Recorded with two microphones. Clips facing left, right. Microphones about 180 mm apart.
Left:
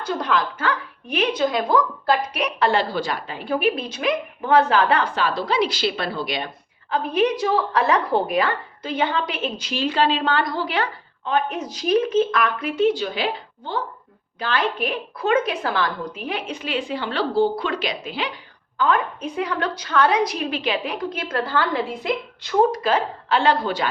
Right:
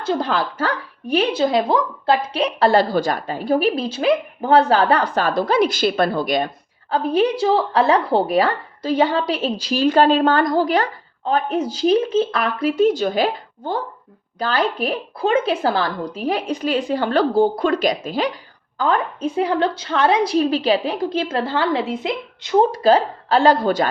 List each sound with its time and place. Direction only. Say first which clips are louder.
0.0 s speech: right 2 dB; 30° right (ahead or behind); by 6.5 s 45° right (ahead or behind)
6.9 s speech: right 3 dB; 30° right (ahead or behind)
18.8 s a woman's voice: right 2 dB; 30° right (ahead or behind)